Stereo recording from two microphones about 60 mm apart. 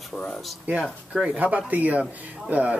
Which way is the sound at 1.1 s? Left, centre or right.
Centre.